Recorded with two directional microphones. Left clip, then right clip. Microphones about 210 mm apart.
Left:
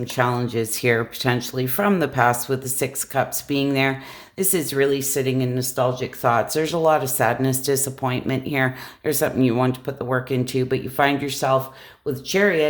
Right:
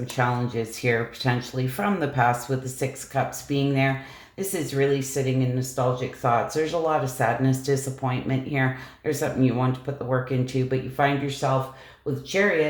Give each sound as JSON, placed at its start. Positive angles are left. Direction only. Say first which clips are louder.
{"t": 0.0, "sound": "speech", "louder": "left 4 dB", "side_deg": 50}